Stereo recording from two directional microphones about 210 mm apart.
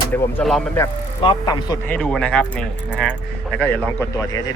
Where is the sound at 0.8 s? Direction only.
20° left (ahead or behind).